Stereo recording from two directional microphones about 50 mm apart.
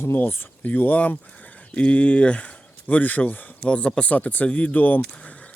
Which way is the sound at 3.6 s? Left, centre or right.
Left.